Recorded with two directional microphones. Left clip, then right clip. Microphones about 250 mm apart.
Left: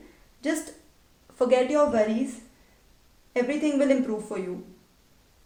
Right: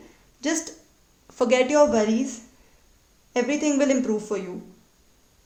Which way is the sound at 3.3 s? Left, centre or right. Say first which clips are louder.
Right 2 dB; right.